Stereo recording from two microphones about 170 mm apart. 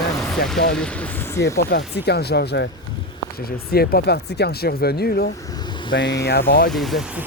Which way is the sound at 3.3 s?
65° left (ahead or behind).